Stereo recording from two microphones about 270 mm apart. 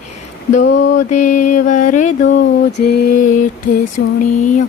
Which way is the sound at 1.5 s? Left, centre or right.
Left.